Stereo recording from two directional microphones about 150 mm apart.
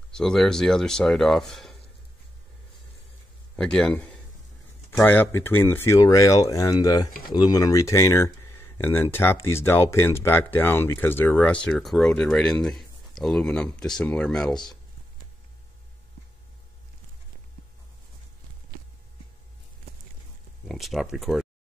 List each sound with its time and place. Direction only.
0.1 s speech: 5° left (ahead or behind)
3.5 s speech: 5° left (ahead or behind)
20.6 s speech: centre (ahead or behind)